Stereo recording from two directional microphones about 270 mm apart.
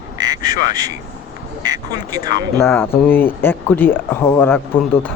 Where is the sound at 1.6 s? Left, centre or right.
Centre.